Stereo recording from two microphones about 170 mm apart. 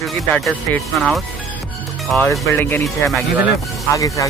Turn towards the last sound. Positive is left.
turn(degrees=20)  # may be behind; listen again after turning